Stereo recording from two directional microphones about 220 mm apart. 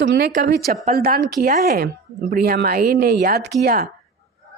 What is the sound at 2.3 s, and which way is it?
Speech, 40° right (ahead or behind).